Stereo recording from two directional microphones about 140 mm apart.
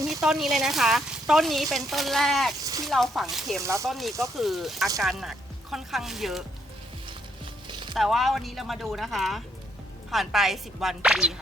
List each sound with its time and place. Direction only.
0.1 s speech: centre (ahead or behind)
2.6 s a sound: 25° right (ahead or behind)
2.8 s speech: centre (ahead or behind)
3.6 s speech: 20° right (ahead or behind)
3.8 s speech: centre (ahead or behind)
7.7 s music: 35° right (ahead or behind)
7.9 s speech: centre (ahead or behind)